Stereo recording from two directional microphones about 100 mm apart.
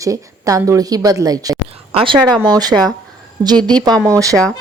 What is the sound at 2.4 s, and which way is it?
Speech, 40° right (ahead or behind).